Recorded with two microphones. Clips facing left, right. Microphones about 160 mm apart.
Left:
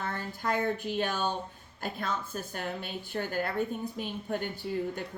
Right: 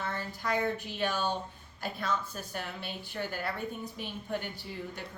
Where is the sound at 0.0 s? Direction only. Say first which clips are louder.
Left 2 dB; 50° left (ahead or behind).